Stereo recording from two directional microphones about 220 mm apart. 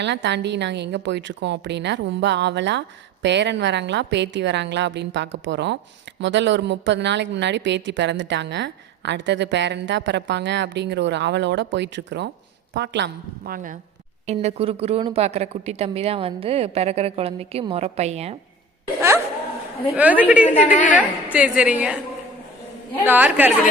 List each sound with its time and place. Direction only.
0.0 s a woman's voice: 55° right (ahead or behind)
14.3 s a woman's voice: 30° right (ahead or behind)
20.0 s a woman's voice: 5° right (ahead or behind)
20.6 s a woman's voice: 35° left (ahead or behind)
21.3 s a woman's voice: 5° right (ahead or behind)
23.0 s a woman's voice: 10° right (ahead or behind)